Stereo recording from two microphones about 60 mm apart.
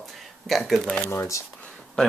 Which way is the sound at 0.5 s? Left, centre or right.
Centre.